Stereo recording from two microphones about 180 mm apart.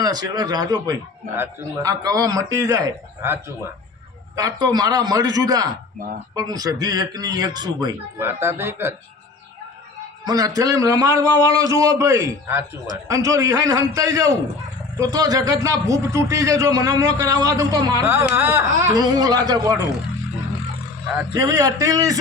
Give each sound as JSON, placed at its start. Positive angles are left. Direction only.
{"t": 0.0, "sound": "speech", "side_deg": -20}
{"t": 10.2, "sound": "speech", "side_deg": -20}
{"t": 21.3, "sound": "speech", "side_deg": -20}